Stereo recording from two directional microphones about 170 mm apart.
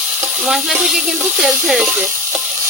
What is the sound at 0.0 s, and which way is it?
Sizzle, 5° right (ahead or behind).